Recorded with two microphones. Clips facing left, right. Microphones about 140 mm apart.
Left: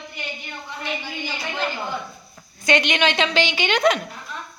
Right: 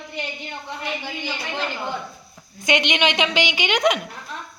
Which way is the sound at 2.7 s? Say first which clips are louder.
Left 1 dB; 20° right (ahead or behind).